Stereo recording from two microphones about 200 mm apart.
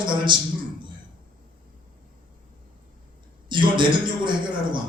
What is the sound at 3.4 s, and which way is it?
Speech, 25° right (ahead or behind).